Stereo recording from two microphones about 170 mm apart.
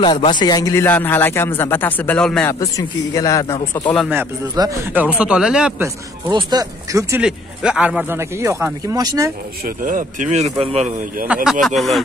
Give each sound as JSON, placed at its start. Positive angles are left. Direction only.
{"t": 0.0, "sound": "a man's voice", "side_deg": 25}
{"t": 2.6, "sound": "speech", "side_deg": 20}
{"t": 4.6, "sound": "speech", "side_deg": -20}
{"t": 4.9, "sound": "speech", "side_deg": -5}
{"t": 6.2, "sound": "speech", "side_deg": -25}
{"t": 7.2, "sound": "speech", "side_deg": -5}
{"t": 9.7, "sound": "speech", "side_deg": -55}
{"t": 11.3, "sound": "speech", "side_deg": -5}